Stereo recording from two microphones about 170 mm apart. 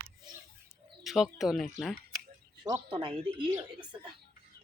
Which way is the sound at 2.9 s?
30° right (ahead or behind).